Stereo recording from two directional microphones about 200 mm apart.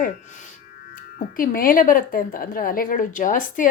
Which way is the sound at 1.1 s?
45° left (ahead or behind).